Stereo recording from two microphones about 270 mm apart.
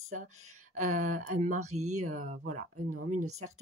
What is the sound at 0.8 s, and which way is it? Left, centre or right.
Speech, right.